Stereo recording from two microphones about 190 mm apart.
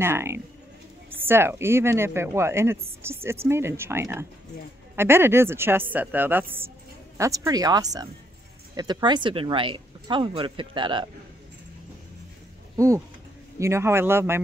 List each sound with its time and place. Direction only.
0.0 s a woman's voice: 15° right (ahead or behind)
12.7 s a woman's voice: 15° right (ahead or behind)